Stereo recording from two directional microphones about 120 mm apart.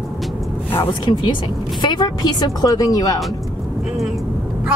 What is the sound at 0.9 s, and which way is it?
A woman's voice, 45° left (ahead or behind).